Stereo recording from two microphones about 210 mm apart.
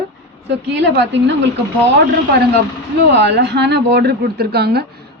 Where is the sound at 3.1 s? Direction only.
55° right (ahead or behind).